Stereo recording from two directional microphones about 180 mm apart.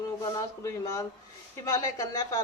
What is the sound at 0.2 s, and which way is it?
A woman's voice, 20° left (ahead or behind).